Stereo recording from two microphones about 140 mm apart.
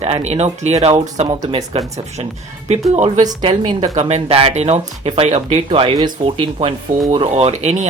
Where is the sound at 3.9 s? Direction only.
50° right (ahead or behind).